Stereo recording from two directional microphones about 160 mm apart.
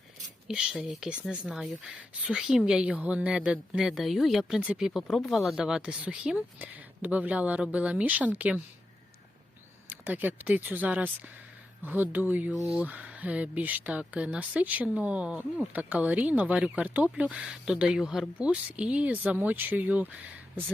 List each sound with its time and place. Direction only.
0.4 s speech: 5° right (ahead or behind)
9.8 s speech: 10° right (ahead or behind)